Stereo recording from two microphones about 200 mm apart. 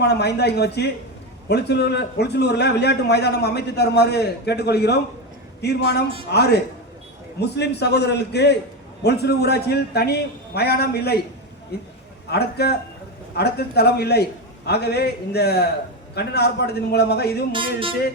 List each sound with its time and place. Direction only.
0.0 s a man's voice: 55° left (ahead or behind)
17.5 s music: 25° right (ahead or behind)